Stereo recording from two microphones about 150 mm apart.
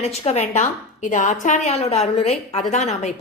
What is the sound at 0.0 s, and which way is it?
A woman's voice, 45° left (ahead or behind).